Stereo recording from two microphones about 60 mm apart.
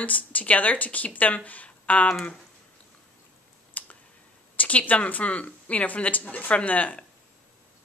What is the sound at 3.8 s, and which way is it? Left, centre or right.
Clicking, left.